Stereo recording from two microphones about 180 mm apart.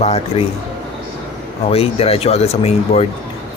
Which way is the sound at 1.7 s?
35° left (ahead or behind).